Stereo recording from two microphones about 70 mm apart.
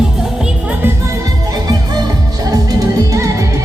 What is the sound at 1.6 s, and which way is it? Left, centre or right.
Music, right.